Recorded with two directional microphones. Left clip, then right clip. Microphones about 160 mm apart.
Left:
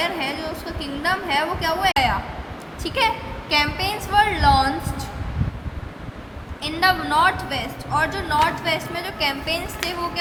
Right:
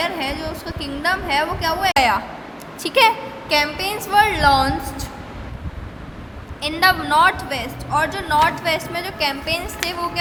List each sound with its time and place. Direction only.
0.0 s a woman's voice: 35° right (ahead or behind)
6.6 s a woman's voice: 40° right (ahead or behind)